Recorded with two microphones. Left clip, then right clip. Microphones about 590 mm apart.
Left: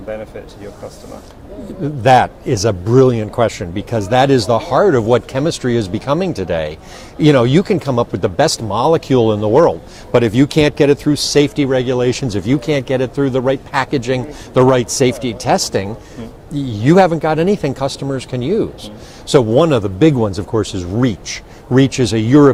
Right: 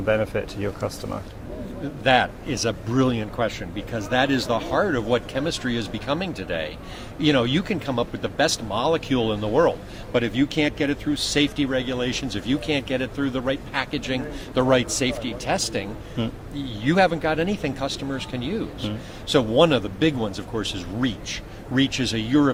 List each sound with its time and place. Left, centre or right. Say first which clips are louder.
0.1 s speech: right 4 dB; right
2.0 s speech: left 9 dB; left
10.2 s speech: left 10 dB; left
16.8 s speech: left 9 dB; left